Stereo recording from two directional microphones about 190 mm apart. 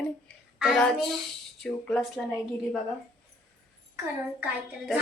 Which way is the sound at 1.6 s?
5° left (ahead or behind).